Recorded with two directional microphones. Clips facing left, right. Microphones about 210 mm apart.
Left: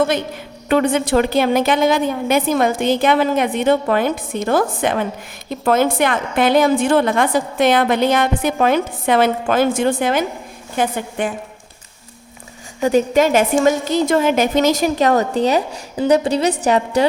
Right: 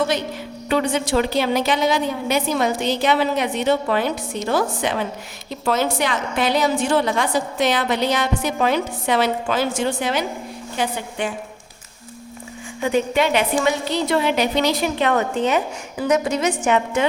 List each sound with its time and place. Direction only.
0.7 s a woman's voice: 55° left (ahead or behind)
12.8 s a woman's voice: 40° left (ahead or behind)